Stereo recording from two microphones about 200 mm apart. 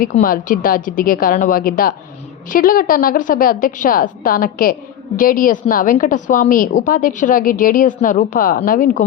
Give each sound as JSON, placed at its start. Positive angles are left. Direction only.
{"t": 0.1, "sound": "a woman's voice", "side_deg": 45}